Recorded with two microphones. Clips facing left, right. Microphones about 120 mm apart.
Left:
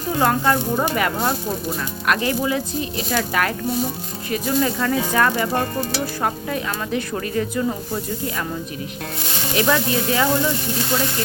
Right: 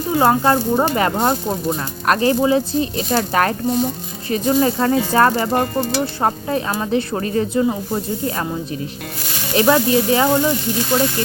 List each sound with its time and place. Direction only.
0.2 s speech: 30° right (ahead or behind)
9.6 s speech: 30° right (ahead or behind)